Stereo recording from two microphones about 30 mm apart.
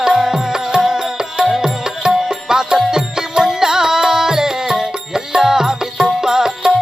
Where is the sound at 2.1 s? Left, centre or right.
Centre.